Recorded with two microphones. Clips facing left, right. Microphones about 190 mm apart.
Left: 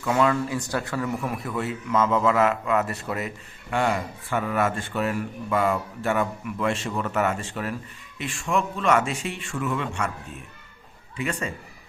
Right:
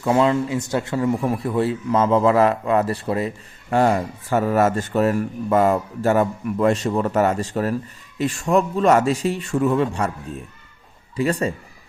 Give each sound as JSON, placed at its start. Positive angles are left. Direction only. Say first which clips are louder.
{"t": 0.0, "sound": "speech", "louder": "right 4 dB", "side_deg": -25}
{"t": 11.2, "sound": "speech", "louder": "right 8 dB", "side_deg": -35}